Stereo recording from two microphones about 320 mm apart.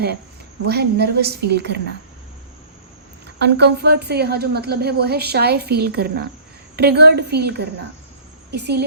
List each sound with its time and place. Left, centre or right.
0.7 s a woman's voice: right
3.3 s a woman's voice: right